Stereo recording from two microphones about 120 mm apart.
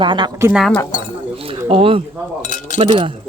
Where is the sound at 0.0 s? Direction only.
40° right (ahead or behind).